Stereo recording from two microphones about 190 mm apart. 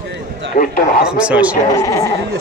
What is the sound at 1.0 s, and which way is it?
Speech, 5° right (ahead or behind).